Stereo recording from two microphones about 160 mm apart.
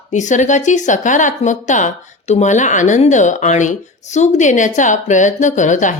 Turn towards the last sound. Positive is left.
turn(degrees=50)  # may be behind; listen again after turning